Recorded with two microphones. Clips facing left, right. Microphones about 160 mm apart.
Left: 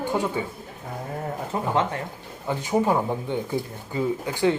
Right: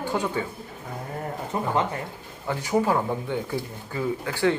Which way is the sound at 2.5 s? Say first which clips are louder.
Left 1 dB; 20° left (ahead or behind).